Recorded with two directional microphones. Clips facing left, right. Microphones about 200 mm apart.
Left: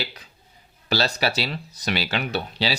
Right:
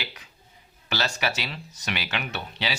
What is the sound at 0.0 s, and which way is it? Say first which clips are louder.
Speech: left 6 dB; 35° left (ahead or behind).